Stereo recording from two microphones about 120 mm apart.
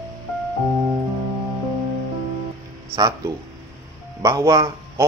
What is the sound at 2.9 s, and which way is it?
Speech, 30° right (ahead or behind).